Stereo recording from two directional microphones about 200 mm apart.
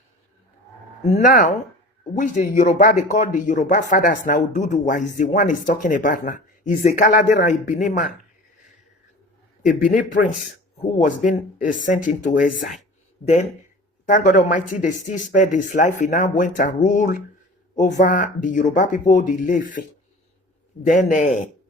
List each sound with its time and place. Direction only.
1.1 s speech: 40° left (ahead or behind)
9.6 s speech: 40° left (ahead or behind)
14.1 s speech: 40° left (ahead or behind)